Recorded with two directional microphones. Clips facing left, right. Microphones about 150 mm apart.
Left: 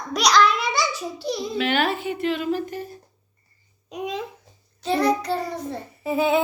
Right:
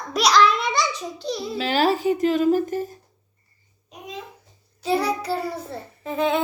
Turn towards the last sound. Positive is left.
turn(degrees=5)  # may be behind; listen again after turning